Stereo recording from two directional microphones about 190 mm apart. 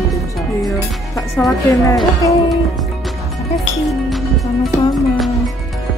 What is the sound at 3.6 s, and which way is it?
Music, centre (ahead or behind).